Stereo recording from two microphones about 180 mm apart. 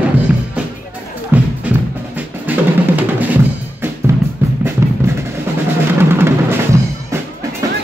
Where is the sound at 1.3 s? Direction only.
10° right (ahead or behind).